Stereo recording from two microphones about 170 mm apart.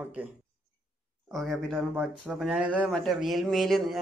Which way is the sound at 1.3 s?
Centre (ahead or behind).